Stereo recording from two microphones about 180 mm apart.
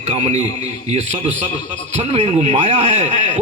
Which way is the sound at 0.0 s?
40° right (ahead or behind).